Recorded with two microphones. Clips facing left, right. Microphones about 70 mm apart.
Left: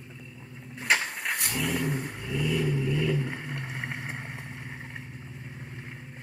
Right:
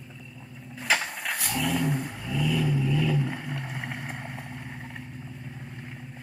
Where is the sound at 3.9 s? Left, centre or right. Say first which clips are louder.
Right 1 dB; centre.